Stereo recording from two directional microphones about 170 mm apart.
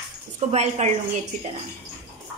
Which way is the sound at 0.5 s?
40° right (ahead or behind).